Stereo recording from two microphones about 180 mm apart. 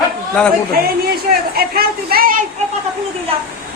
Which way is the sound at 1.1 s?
60° right (ahead or behind).